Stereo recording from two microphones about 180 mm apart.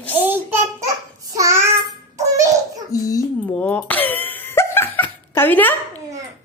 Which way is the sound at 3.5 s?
10° left (ahead or behind).